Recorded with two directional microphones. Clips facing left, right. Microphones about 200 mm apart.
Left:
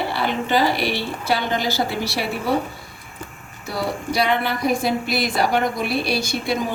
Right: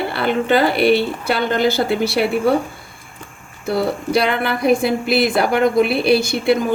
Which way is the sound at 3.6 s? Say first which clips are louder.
Right 6 dB; 55° right (ahead or behind).